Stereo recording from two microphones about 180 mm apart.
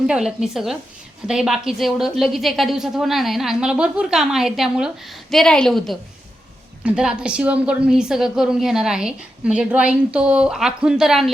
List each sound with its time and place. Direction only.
0.1 s a woman's voice: 5° right (ahead or behind)